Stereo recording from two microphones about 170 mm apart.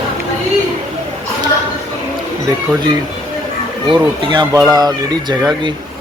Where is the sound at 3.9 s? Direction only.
25° right (ahead or behind).